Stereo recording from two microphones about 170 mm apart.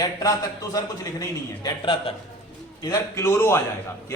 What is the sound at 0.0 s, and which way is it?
A man's voice, 20° left (ahead or behind).